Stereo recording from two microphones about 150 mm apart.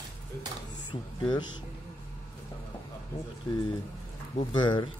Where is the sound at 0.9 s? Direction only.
30° left (ahead or behind).